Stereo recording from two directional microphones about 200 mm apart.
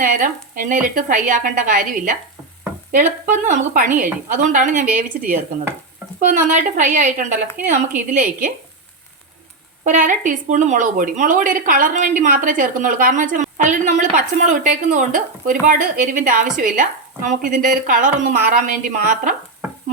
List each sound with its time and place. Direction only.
0.0 s speech: 40° right (ahead or behind)
6.1 s speech: 40° right (ahead or behind)
9.8 s speech: 40° right (ahead or behind)